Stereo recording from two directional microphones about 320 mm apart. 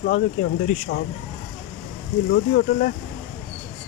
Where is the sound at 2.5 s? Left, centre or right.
Left.